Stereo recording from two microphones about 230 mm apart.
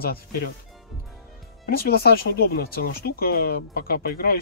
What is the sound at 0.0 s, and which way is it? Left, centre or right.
Speech, left.